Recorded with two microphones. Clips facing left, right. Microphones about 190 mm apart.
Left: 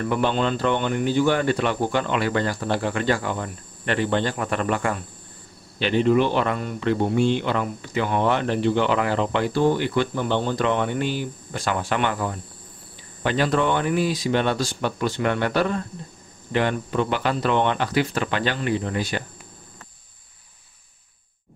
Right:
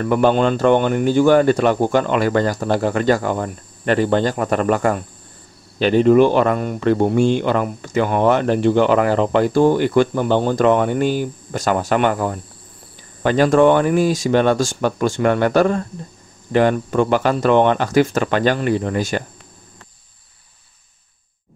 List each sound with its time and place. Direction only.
0.0 s speech: 50° right (ahead or behind)